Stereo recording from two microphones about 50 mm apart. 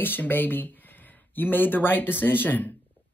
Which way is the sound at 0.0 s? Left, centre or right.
Left.